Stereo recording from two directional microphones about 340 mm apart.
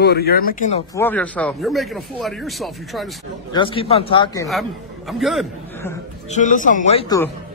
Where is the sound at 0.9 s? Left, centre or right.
Centre.